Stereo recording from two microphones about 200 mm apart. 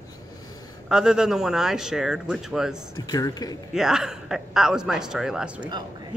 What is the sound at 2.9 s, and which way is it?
Speech, 20° left (ahead or behind).